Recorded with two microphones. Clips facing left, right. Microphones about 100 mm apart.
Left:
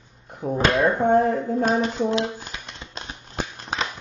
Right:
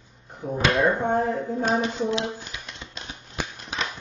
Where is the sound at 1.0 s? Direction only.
55° left (ahead or behind).